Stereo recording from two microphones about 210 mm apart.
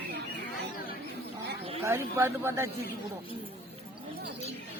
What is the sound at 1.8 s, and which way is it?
Speech, 10° right (ahead or behind).